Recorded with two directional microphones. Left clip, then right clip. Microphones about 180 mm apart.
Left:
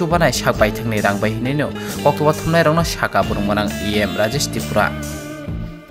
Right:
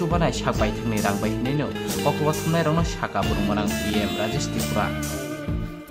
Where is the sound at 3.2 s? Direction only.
Centre (ahead or behind).